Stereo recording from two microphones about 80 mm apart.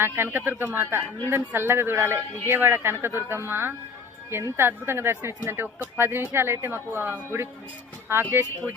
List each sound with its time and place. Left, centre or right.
0.0 s speech: right